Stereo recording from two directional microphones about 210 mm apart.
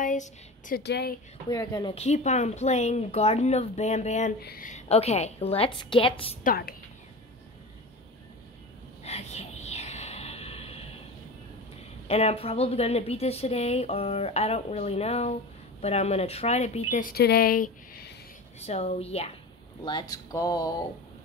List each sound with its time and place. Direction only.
0.0 s a sound: 40° left (ahead or behind)
0.8 s speech: 50° left (ahead or behind)
1.5 s speech: 20° left (ahead or behind); by 4.3 s 35° left (ahead or behind)
4.4 s speech: 45° left (ahead or behind); by 6.3 s 25° left (ahead or behind)
6.4 s a woman's voice: 45° left (ahead or behind)
9.0 s a sound: 30° left (ahead or behind)
12.1 s speech: 30° left (ahead or behind)
18.6 s speech: 30° left (ahead or behind)